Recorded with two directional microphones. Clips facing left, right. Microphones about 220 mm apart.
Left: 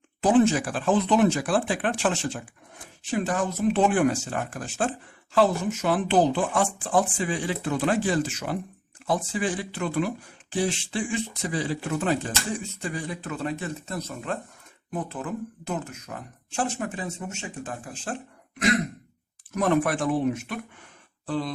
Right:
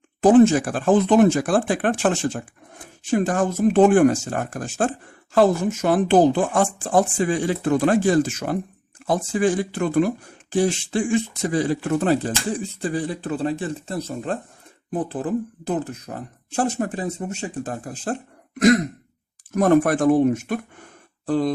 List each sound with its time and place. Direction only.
0.2 s speech: 45° right (ahead or behind)
19.5 s speech: 45° right (ahead or behind)